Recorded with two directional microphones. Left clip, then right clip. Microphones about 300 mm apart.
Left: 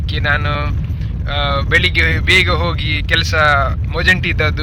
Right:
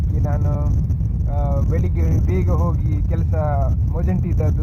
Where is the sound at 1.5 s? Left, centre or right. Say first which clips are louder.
Left 18 dB; left.